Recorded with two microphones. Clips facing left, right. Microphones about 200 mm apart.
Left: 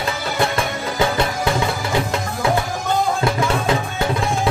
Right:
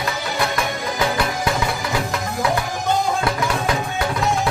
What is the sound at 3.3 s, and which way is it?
Music, 25° left (ahead or behind).